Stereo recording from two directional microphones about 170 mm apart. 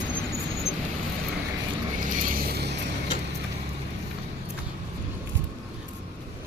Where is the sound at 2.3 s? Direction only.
60° right (ahead or behind).